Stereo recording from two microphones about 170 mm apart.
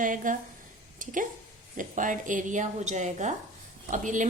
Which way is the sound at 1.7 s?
50° right (ahead or behind).